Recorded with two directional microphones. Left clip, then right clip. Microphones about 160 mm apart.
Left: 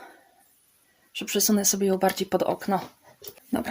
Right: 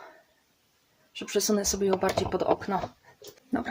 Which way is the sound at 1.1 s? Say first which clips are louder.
Left 2 dB; 60° left (ahead or behind).